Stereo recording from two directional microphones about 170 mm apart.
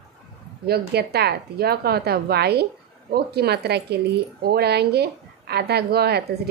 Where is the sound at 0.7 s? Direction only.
70° right (ahead or behind).